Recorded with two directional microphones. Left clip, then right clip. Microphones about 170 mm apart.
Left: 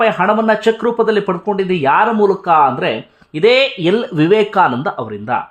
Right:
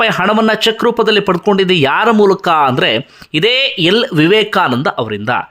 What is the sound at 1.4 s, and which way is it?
Speech, 35° right (ahead or behind).